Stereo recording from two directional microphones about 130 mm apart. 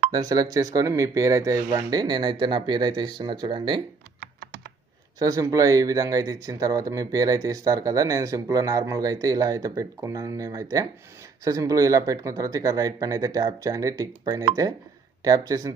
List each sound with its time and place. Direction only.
0.1 s speech: 30° right (ahead or behind)
5.2 s speech: 25° right (ahead or behind)